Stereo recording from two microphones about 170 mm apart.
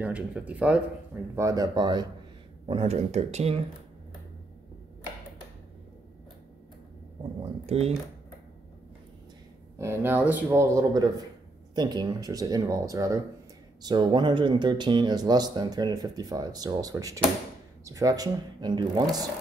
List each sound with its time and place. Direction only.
0.0 s speech: 10° right (ahead or behind)
1.3 s speech: 20° right (ahead or behind)
2.7 s speech: 35° right (ahead or behind)
7.6 s speech: 35° right (ahead or behind)
9.8 s speech: 15° right (ahead or behind)